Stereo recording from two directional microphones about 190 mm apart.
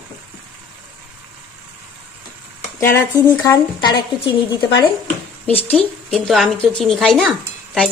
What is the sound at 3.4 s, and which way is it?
Speech, 25° left (ahead or behind).